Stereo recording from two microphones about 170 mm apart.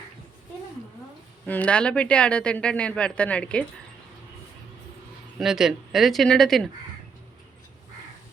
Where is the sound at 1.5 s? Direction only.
10° left (ahead or behind).